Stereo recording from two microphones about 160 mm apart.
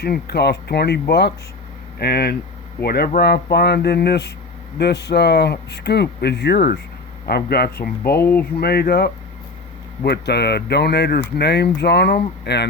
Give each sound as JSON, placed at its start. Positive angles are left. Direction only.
{"t": 0.0, "sound": "speech", "side_deg": 90}
{"t": 2.0, "sound": "speech", "side_deg": 75}
{"t": 8.2, "sound": "speech", "side_deg": 10}
{"t": 8.6, "sound": "speech", "side_deg": 80}